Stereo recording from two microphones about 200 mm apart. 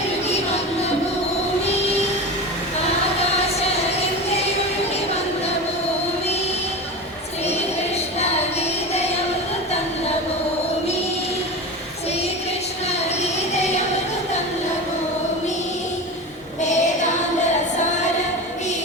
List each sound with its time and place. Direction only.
7.4 s a sound: 30° left (ahead or behind)
13.6 s music: 35° left (ahead or behind)
16.6 s female singing: 35° left (ahead or behind)